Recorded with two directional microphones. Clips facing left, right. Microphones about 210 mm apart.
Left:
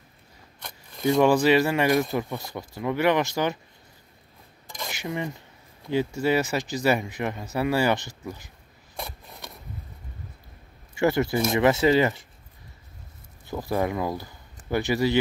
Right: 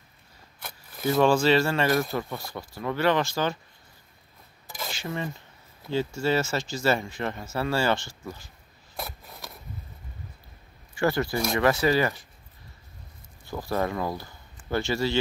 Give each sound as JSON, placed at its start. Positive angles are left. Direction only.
{"t": 0.6, "sound": "a sound", "side_deg": -5}
{"t": 1.2, "sound": "speech", "side_deg": 15}
{"t": 4.8, "sound": "speech", "side_deg": 15}
{"t": 8.9, "sound": "a sound", "side_deg": 0}
{"t": 11.0, "sound": "speech", "side_deg": 20}
{"t": 13.5, "sound": "speech", "side_deg": 15}